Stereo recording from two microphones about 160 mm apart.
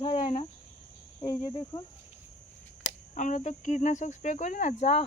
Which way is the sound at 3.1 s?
50° left (ahead or behind).